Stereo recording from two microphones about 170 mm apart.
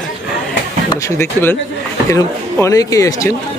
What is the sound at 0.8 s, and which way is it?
Speech, 15° left (ahead or behind).